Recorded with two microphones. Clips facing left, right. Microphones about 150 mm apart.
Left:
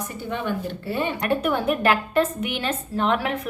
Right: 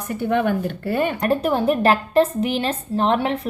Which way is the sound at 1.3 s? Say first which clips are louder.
Right 3 dB; 35° right (ahead or behind).